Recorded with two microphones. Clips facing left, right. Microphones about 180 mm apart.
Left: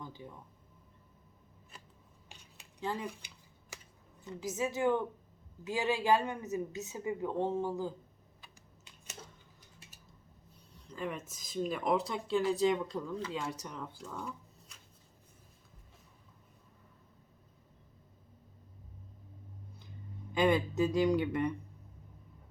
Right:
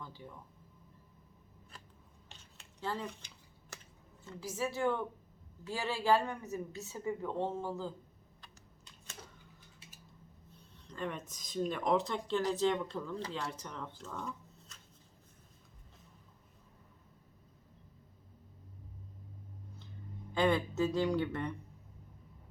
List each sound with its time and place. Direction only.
2.3 s finger snapping: 15° left (ahead or behind)
4.2 s speech: 15° left (ahead or behind)
10.8 s speech: 5° left (ahead or behind)
20.3 s speech: 15° left (ahead or behind)